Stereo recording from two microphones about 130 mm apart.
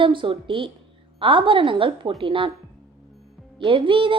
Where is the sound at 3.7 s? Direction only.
40° right (ahead or behind).